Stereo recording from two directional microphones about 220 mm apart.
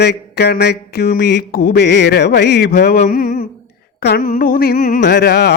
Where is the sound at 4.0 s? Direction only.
45° left (ahead or behind).